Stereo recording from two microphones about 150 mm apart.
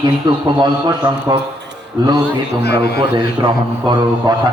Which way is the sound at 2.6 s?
90° left.